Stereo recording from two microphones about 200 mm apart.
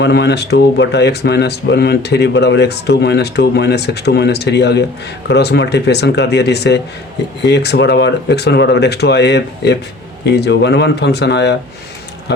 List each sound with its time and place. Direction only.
0.0 s speech: 60° left (ahead or behind)